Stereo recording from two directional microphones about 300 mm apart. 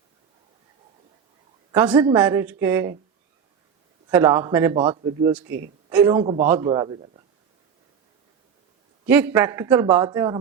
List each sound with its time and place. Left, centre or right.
1.7 s a woman's voice: centre
4.1 s a man's voice: centre
5.5 s speech: right
5.9 s a man's voice: centre
9.0 s a man's voice: centre